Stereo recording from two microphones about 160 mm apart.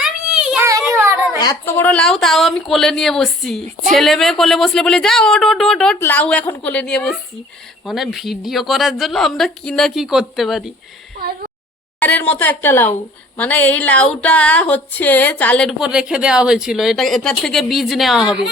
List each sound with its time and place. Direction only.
0.0 s child singing: 5° right (ahead or behind)
0.6 s a sound: 15° right (ahead or behind)
1.6 s a woman's voice: 10° left (ahead or behind)
11.9 s a woman's voice: 10° left (ahead or behind)